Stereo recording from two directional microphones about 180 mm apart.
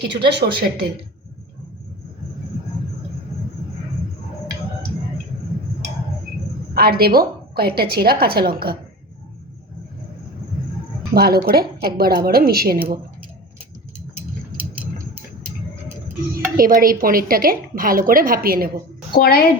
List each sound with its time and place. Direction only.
0.2 s a woman's voice: 65° right (ahead or behind)
6.7 s a woman's voice: 60° right (ahead or behind)
11.1 s a woman's voice: 60° right (ahead or behind)
16.3 s a woman's voice: 50° right (ahead or behind)
19.1 s a woman's voice: 55° left (ahead or behind)